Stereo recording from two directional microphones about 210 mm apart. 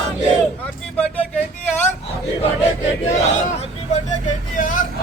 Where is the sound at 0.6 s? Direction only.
5° left (ahead or behind).